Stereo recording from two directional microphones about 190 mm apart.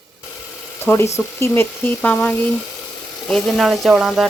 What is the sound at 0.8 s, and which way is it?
Speech, 15° left (ahead or behind).